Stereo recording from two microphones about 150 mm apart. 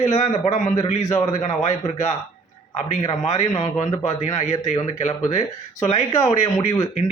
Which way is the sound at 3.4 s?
20° left (ahead or behind).